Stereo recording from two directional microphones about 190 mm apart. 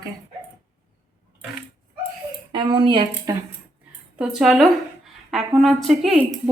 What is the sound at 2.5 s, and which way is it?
Speech, 25° right (ahead or behind).